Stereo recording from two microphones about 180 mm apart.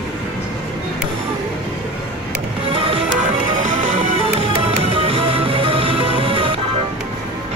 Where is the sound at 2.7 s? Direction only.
30° right (ahead or behind).